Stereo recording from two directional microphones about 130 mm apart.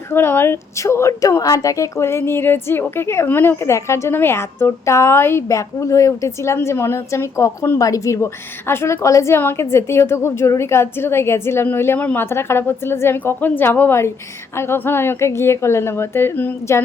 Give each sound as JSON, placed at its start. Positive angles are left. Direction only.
{"t": 0.1, "sound": "a woman's voice", "side_deg": 15}